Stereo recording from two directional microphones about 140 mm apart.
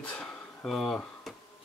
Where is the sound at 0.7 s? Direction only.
Centre (ahead or behind).